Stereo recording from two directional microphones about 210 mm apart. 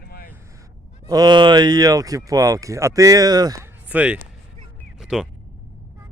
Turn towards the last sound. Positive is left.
turn(degrees=-5)  # may be behind; listen again after turning